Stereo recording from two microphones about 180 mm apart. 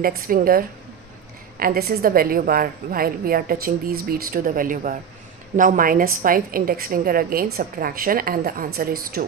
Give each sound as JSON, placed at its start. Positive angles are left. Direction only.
{"t": 0.0, "sound": "a woman's voice", "side_deg": -55}